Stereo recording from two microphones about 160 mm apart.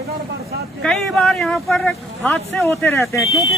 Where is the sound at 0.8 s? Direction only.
5° left (ahead or behind).